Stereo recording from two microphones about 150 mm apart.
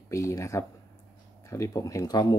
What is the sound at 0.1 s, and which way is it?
Speech, 20° left (ahead or behind).